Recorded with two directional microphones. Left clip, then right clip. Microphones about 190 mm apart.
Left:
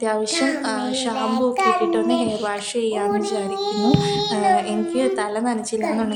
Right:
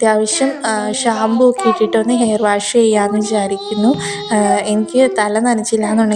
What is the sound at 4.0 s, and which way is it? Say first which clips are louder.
A child's voice: right 4 dB; 30° right (ahead or behind).